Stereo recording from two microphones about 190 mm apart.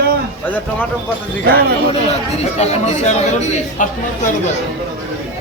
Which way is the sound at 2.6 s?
35° left (ahead or behind).